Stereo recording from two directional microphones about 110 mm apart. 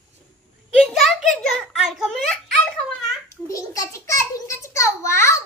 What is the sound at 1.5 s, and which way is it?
Giggle, 5° right (ahead or behind).